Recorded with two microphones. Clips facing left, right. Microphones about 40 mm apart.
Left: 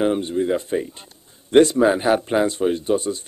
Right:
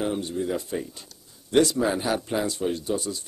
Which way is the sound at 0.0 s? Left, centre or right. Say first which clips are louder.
Left 7 dB; left.